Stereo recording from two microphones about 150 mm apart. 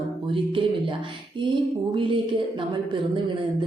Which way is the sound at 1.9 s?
35° right (ahead or behind).